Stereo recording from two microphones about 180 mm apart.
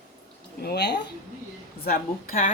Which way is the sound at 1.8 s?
55° left (ahead or behind).